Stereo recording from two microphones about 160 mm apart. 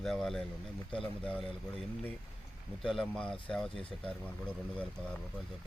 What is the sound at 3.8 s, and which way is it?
Speech, 35° left (ahead or behind).